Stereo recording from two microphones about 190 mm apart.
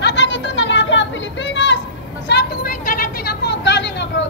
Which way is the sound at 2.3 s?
55° left (ahead or behind).